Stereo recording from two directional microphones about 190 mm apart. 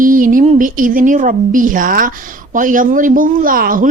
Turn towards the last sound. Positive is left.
turn(degrees=-45)  # may be behind; listen again after turning